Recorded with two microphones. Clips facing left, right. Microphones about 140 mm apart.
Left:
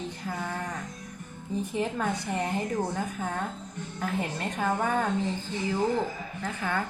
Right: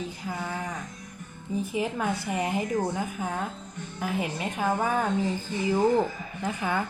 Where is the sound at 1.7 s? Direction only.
5° right (ahead or behind).